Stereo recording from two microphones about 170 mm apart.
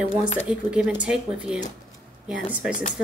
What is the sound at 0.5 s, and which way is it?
Speech, 5° right (ahead or behind).